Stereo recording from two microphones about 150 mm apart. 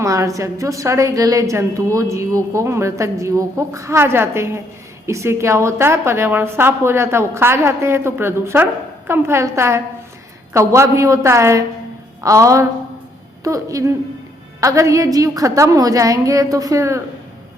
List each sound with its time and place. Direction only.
0.0 s a woman's voice: 20° right (ahead or behind)